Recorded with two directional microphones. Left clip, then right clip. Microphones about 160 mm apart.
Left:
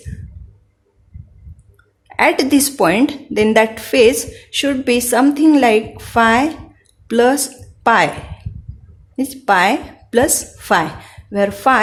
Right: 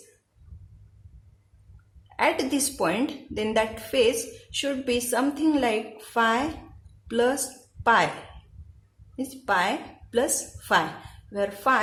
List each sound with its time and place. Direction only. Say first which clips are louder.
2.1 s a woman's voice: left 11 dB; 50° left (ahead or behind)
9.1 s a woman's voice: left 11 dB; 45° left (ahead or behind)
11.3 s a woman's voice: left 10 dB; 45° left (ahead or behind)